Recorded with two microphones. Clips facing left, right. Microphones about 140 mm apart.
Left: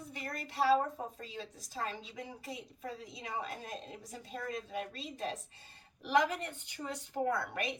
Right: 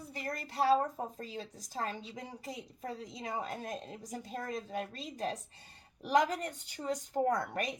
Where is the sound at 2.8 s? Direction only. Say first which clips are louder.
Right 2 dB; 40° right (ahead or behind).